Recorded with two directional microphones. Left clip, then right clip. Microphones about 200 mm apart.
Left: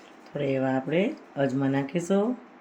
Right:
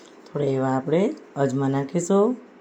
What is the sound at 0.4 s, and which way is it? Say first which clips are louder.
Speech: right 3 dB; 20° right (ahead or behind).